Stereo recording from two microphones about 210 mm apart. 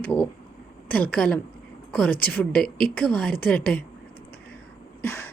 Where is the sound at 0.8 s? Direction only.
5° left (ahead or behind).